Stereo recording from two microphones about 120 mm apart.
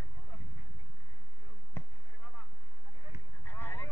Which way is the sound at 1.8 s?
20° left (ahead or behind).